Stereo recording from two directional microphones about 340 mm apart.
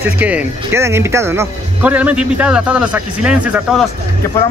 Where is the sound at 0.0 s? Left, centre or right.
Centre.